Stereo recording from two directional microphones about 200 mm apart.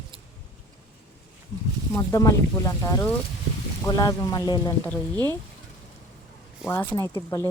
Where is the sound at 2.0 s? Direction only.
15° left (ahead or behind).